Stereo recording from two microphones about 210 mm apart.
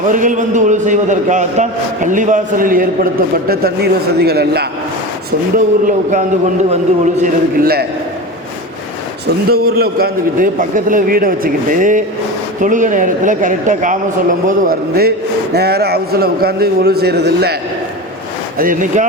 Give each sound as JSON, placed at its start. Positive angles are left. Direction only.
{"t": 0.1, "sound": "a man's voice", "side_deg": -35}
{"t": 5.5, "sound": "a man's voice", "side_deg": -40}
{"t": 9.5, "sound": "a man's voice", "side_deg": -45}